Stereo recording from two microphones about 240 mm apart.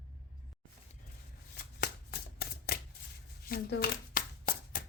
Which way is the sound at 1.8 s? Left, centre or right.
Left.